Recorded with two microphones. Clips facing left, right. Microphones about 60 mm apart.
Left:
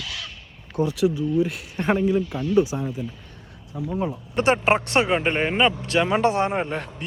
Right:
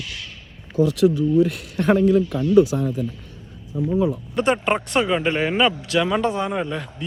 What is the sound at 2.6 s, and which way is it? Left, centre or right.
Speech, left.